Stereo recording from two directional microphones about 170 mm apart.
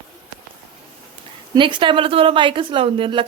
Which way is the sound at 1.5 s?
30° right (ahead or behind).